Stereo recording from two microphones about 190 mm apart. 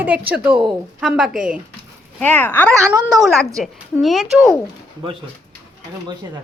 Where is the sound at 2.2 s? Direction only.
10° left (ahead or behind).